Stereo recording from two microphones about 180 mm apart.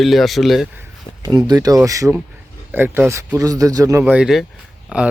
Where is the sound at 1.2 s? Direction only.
25° right (ahead or behind).